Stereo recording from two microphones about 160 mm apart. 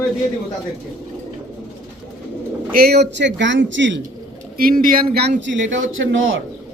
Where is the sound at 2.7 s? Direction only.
75° right (ahead or behind).